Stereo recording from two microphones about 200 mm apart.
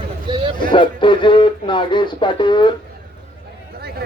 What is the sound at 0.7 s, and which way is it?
Speech, 25° left (ahead or behind).